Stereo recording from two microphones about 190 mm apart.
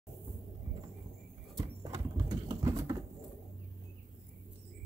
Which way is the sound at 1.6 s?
20° right (ahead or behind).